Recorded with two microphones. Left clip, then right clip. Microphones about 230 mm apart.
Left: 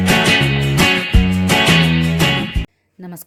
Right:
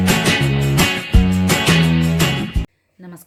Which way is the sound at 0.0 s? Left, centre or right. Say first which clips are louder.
Left 3 dB; centre.